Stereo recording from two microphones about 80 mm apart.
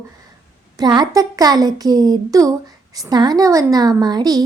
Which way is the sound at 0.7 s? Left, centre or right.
Right.